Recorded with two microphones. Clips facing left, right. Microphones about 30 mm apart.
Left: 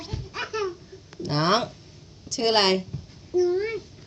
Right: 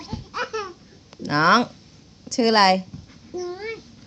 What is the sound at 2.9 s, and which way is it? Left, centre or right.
Babbling, centre.